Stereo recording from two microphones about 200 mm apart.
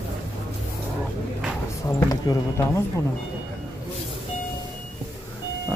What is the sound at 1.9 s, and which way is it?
Speech, 15° left (ahead or behind).